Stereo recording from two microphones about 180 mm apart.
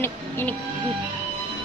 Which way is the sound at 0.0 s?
10° left (ahead or behind).